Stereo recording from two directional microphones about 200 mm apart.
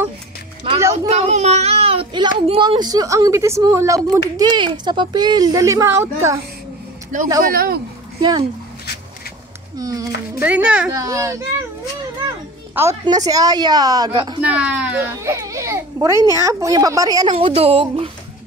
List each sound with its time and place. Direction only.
1.1 s a woman's voice: 35° right (ahead or behind); by 6.4 s 15° right (ahead or behind)
7.1 s speech: 40° right (ahead or behind)
8.2 s a woman's voice: 25° right (ahead or behind)
9.8 s a child's voice: 15° right (ahead or behind)
12.7 s a woman's voice: 15° right (ahead or behind)
14.4 s a child's voice: 5° right (ahead or behind)
17.3 s a woman's voice: 30° right (ahead or behind)